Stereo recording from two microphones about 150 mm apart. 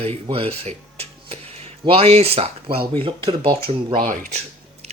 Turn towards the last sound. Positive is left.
turn(degrees=-65)  # may be behind; listen again after turning